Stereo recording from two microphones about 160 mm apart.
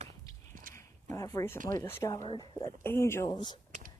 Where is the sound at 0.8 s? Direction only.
20° left (ahead or behind).